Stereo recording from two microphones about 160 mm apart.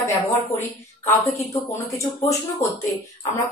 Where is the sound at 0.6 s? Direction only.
15° left (ahead or behind).